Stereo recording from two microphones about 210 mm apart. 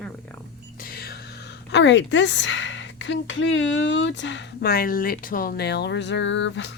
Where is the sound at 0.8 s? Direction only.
45° left (ahead or behind).